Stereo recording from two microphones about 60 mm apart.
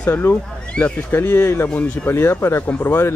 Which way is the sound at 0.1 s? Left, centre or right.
Left.